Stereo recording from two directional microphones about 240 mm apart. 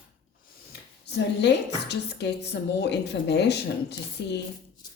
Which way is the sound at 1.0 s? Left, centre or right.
Left.